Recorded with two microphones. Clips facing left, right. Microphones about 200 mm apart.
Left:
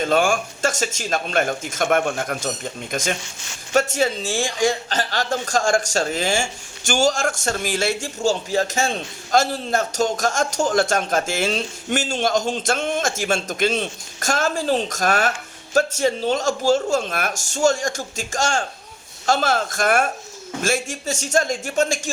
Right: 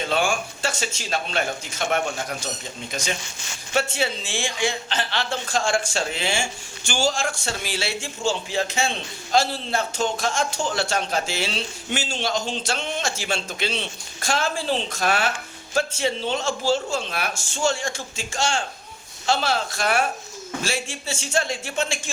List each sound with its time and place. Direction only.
0.0 s a man's voice: 45° left (ahead or behind)
3.7 s a man's voice: 45° left (ahead or behind)